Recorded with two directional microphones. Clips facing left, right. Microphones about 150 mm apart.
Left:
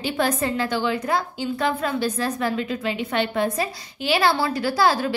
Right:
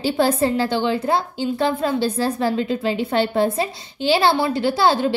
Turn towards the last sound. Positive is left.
turn(degrees=-25)  # may be behind; listen again after turning